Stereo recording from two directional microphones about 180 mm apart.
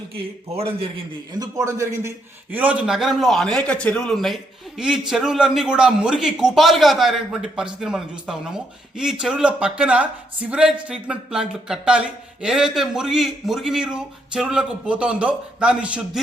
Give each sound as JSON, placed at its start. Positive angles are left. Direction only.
{"t": 0.1, "sound": "a man's voice", "side_deg": -30}
{"t": 1.3, "sound": "speech", "side_deg": -20}